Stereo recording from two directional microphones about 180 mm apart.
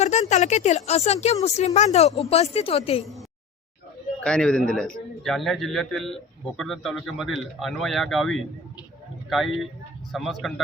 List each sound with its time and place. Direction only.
0.0 s speech: 40° left (ahead or behind)
4.2 s a man's voice: 5° left (ahead or behind)